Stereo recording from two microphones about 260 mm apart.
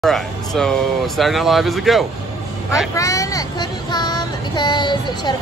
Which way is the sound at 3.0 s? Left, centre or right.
Centre.